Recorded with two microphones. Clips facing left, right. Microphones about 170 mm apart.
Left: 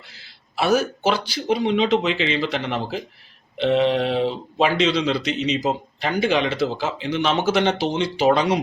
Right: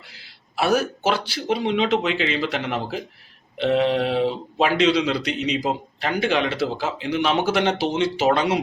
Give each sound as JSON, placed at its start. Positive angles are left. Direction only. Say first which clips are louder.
{"t": 0.5, "sound": "speech", "louder": "left 1 dB", "side_deg": -5}